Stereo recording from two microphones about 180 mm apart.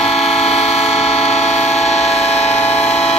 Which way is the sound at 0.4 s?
35° left (ahead or behind).